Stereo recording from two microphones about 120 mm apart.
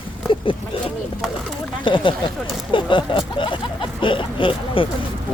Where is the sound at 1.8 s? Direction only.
40° left (ahead or behind).